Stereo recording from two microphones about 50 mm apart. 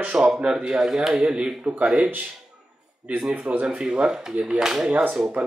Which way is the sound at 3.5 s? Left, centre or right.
Right.